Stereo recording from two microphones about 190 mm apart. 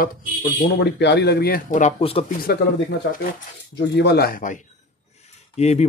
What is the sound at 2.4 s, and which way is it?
Speech, 55° left (ahead or behind).